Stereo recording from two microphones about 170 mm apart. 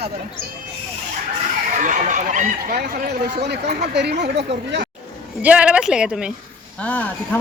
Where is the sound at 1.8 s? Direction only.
45° right (ahead or behind).